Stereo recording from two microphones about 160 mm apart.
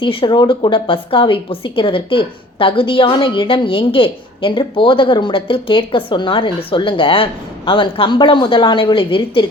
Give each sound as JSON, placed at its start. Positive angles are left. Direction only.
{"t": 0.0, "sound": "a woman's voice", "side_deg": 30}